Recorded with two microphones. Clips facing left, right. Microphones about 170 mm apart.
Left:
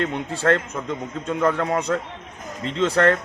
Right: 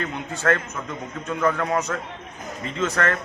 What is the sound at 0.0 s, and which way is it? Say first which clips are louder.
A man's voice: left 3 dB; 30° left (ahead or behind).